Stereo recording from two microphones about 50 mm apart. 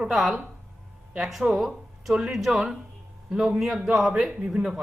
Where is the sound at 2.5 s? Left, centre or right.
Centre.